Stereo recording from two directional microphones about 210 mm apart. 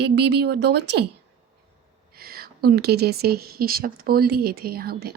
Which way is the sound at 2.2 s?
45° right (ahead or behind).